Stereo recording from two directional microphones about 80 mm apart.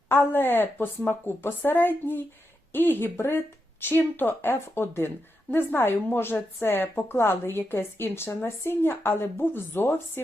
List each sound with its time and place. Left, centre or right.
0.1 s speech: left